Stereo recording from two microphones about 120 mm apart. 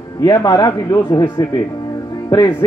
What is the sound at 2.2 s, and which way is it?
Music, 35° left (ahead or behind).